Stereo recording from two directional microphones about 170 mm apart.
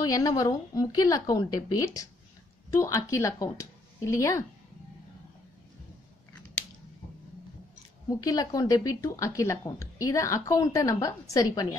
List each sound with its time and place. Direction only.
0.0 s speech: 20° left (ahead or behind)
8.1 s speech: 20° left (ahead or behind)